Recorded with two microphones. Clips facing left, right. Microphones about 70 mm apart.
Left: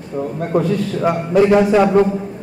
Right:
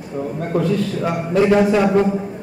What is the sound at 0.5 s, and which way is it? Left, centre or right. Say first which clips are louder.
Speech: left 1 dB; left.